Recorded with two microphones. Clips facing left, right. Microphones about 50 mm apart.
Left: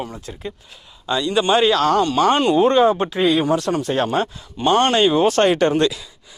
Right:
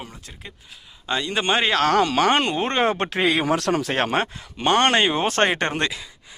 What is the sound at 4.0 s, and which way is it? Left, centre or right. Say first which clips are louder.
Speech: left 2 dB; right.